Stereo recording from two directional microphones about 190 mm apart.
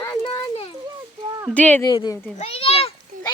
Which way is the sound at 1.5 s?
10° left (ahead or behind).